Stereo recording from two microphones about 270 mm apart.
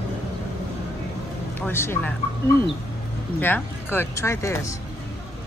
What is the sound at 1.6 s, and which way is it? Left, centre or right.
Speech, centre.